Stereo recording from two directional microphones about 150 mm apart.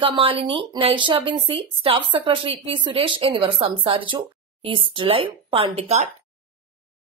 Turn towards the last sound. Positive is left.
turn(degrees=-45)  # may be behind; listen again after turning